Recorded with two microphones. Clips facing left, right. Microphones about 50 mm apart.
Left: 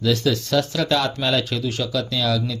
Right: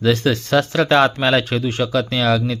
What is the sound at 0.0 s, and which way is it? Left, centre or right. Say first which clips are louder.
Speech: right 3 dB; right.